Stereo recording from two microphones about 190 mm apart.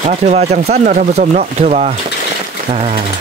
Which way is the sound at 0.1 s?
35° right (ahead or behind).